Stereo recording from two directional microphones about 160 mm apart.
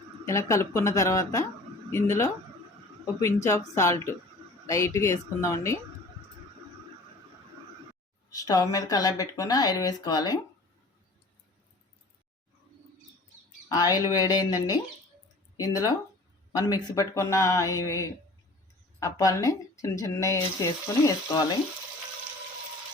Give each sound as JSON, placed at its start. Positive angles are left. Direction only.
{"t": 0.3, "sound": "speech", "side_deg": 20}
{"t": 8.3, "sound": "speech", "side_deg": 20}
{"t": 13.7, "sound": "speech", "side_deg": 25}